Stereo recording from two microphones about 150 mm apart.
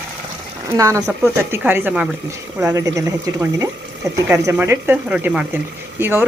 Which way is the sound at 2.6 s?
20° right (ahead or behind).